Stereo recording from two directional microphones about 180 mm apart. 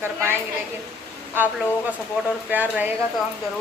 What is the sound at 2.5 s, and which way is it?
Speech, 10° right (ahead or behind).